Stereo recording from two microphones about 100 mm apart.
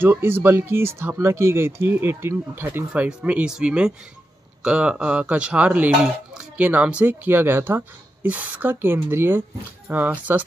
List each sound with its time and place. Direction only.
0.0 s speech: 20° right (ahead or behind)
2.9 s speech: 10° right (ahead or behind)